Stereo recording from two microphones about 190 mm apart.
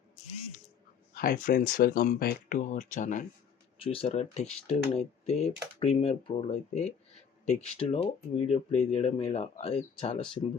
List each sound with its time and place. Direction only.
1.1 s speech: 45° left (ahead or behind)
3.8 s speech: 30° left (ahead or behind)